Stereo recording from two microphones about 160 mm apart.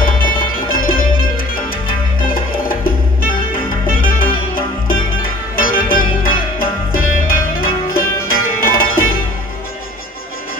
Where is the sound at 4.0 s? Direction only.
65° left (ahead or behind).